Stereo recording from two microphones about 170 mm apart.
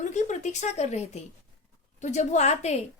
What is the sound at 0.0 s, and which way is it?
A woman's voice, 45° left (ahead or behind).